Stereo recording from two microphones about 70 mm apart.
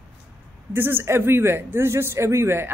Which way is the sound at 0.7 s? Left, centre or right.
Right.